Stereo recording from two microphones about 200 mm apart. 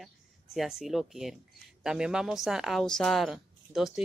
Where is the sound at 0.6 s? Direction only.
Centre (ahead or behind).